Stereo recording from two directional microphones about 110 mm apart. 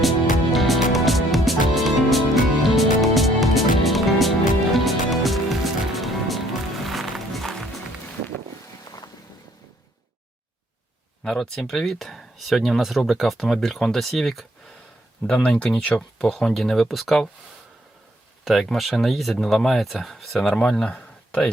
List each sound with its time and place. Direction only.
0.5 s music: centre (ahead or behind)
8.8 s vehicle: 35° left (ahead or behind)
11.2 s speech: 5° left (ahead or behind)
15.4 s speech: 10° left (ahead or behind)
18.4 s speech: centre (ahead or behind)